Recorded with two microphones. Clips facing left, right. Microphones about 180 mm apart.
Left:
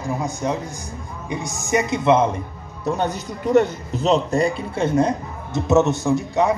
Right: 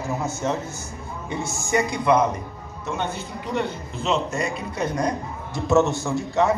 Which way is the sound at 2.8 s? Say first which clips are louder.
Left 6 dB; 40° left (ahead or behind).